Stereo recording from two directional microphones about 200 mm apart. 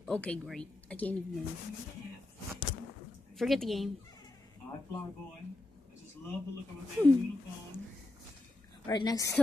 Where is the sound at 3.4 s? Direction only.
Centre (ahead or behind).